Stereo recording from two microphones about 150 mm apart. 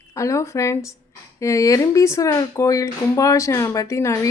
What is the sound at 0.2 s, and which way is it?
Speech, 20° left (ahead or behind).